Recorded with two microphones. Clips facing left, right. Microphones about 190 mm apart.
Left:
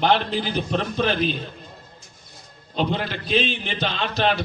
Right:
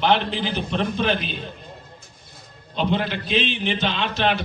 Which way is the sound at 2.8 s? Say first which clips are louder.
Right 1 dB; 40° left (ahead or behind).